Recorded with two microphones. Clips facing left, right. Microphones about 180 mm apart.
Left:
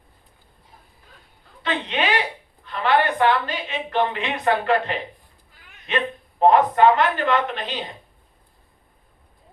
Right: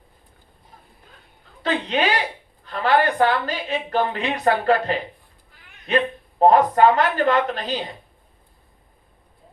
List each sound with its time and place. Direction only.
1.6 s a woman's voice: 40° right (ahead or behind)